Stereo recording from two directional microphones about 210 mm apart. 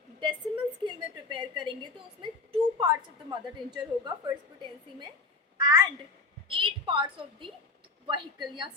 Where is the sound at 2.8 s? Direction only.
20° right (ahead or behind).